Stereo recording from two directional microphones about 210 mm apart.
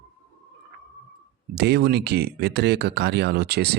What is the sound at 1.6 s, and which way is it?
Speech, 50° right (ahead or behind).